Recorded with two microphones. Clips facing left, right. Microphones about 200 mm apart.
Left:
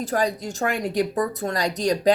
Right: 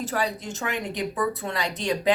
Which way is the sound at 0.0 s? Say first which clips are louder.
Left 4 dB; 40° left (ahead or behind).